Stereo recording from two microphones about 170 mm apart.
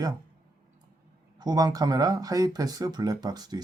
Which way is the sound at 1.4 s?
25° right (ahead or behind).